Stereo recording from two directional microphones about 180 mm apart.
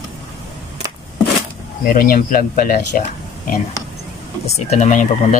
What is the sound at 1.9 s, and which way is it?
Speech, 50° left (ahead or behind).